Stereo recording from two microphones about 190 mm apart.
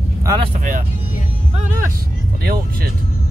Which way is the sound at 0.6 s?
45° right (ahead or behind).